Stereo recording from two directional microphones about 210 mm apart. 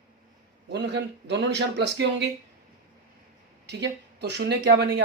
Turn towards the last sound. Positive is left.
turn(degrees=-55)  # may be behind; listen again after turning